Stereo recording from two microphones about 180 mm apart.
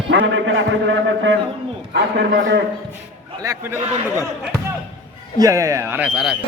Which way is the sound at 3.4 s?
15° right (ahead or behind).